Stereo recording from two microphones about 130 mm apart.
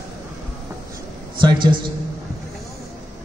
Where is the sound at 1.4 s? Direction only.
40° right (ahead or behind).